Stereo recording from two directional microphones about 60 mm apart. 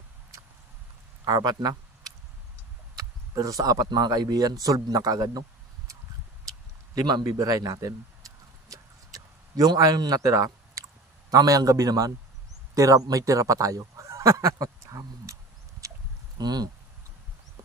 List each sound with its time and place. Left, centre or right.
1.3 s speech: right
3.0 s speech: right
7.0 s a sound: right
12.7 s a man's voice: right
14.0 s honk: right
14.6 s speech: right